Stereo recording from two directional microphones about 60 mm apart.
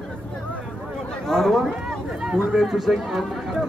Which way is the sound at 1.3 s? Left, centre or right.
Centre.